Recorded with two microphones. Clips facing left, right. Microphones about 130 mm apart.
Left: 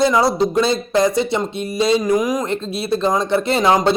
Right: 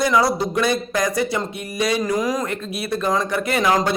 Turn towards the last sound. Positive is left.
turn(degrees=25)  # may be behind; listen again after turning